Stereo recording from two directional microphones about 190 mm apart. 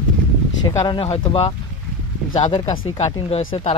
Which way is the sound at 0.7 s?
20° left (ahead or behind).